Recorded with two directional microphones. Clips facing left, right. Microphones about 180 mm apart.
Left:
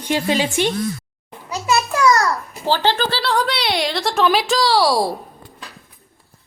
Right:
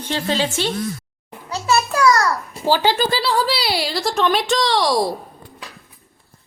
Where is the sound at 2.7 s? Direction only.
15° right (ahead or behind).